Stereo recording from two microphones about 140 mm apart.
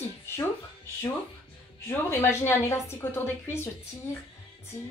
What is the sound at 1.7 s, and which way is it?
A woman's voice, 20° left (ahead or behind).